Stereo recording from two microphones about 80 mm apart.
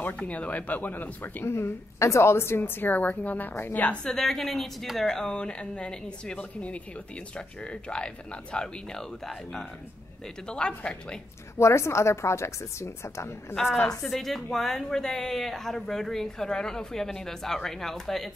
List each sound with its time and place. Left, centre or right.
0.2 s speech: centre
4.0 s speech: centre
11.5 s a woman's voice: left
13.8 s a woman's voice: centre